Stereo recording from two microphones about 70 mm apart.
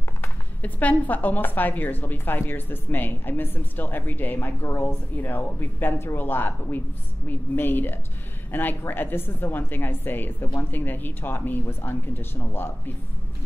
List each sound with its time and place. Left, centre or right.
0.2 s speech: left